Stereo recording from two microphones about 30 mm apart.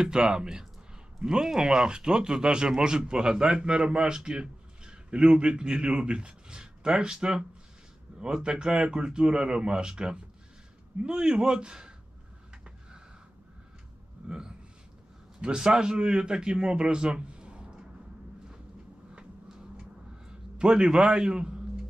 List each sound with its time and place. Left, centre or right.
0.0 s speech: right
3.9 s a sound: right
5.3 s a man's voice: right
15.4 s speech: right
19.8 s a sound: right
20.8 s speech: right